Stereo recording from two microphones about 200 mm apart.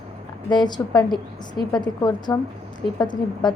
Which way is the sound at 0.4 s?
20° left (ahead or behind).